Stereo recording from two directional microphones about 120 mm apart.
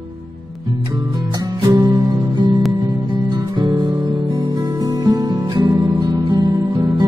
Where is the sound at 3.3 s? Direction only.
40° right (ahead or behind).